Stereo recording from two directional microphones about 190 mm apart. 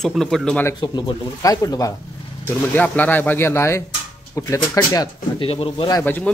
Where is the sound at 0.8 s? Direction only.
20° left (ahead or behind).